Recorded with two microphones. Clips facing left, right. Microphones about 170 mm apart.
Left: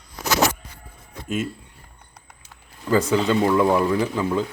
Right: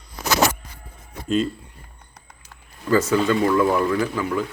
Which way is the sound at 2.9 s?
20° left (ahead or behind).